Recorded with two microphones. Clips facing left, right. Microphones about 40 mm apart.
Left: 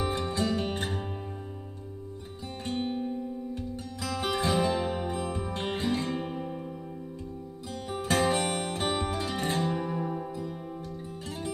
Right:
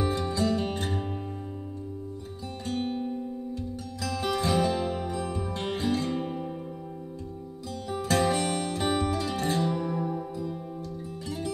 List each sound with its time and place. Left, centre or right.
0.0 s music: left
3.5 s music: left
6.1 s music: centre
7.9 s music: left
11.2 s music: left